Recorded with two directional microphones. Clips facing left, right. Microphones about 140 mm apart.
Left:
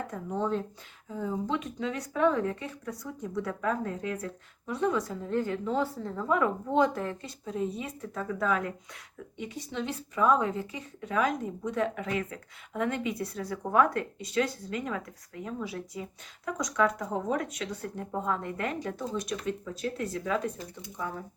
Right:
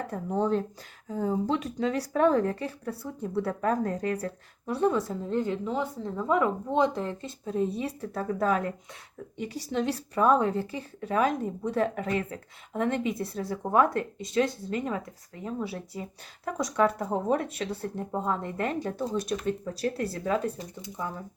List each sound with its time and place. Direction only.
0.1 s a woman's voice: 40° right (ahead or behind)